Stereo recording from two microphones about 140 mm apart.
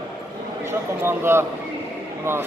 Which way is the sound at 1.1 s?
15° right (ahead or behind).